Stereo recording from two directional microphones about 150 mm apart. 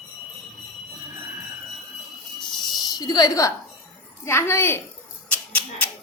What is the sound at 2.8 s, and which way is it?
A woman's voice, 25° left (ahead or behind).